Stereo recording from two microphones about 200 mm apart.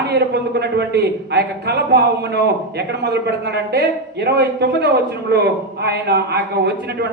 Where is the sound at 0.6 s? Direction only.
55° right (ahead or behind).